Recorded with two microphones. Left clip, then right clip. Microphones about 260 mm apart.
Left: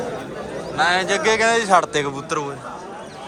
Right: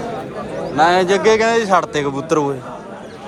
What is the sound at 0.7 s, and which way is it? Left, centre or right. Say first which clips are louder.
A man's voice: right 5 dB; centre.